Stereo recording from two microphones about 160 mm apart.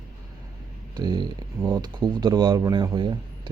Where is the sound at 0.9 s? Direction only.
25° right (ahead or behind).